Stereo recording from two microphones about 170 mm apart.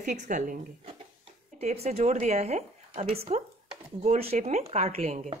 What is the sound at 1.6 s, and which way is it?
Speech, 40° right (ahead or behind).